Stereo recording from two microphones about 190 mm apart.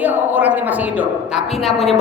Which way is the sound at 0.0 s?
10° right (ahead or behind).